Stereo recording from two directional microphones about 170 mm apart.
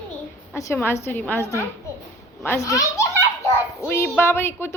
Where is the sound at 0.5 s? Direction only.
15° left (ahead or behind).